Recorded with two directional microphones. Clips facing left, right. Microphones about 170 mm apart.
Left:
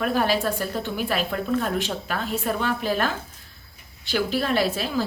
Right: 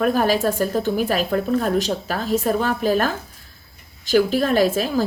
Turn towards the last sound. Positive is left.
turn(degrees=-45)  # may be behind; listen again after turning